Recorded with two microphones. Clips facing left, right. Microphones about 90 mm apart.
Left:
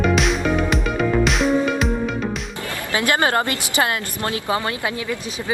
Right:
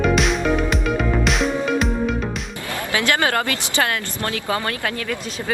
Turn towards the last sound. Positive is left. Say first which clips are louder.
# even
turn(degrees=15)  # may be behind; listen again after turning